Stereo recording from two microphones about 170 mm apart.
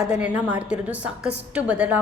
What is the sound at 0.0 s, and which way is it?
A woman's voice, 5° right (ahead or behind).